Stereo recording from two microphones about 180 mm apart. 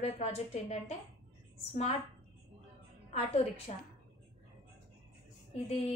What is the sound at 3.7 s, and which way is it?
Speech, 35° left (ahead or behind).